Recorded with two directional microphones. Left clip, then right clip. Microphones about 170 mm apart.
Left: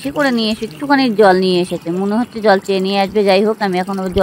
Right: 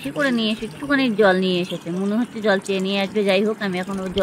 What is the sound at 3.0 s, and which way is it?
Speech, 45° left (ahead or behind).